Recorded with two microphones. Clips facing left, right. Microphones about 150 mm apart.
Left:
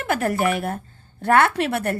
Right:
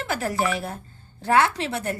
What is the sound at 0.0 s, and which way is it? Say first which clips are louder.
A woman's voice: left 4 dB; 55° left (ahead or behind).